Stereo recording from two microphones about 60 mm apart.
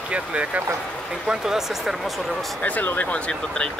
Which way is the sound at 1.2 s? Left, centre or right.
Centre.